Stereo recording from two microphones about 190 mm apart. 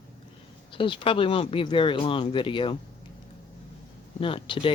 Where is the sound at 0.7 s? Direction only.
25° left (ahead or behind).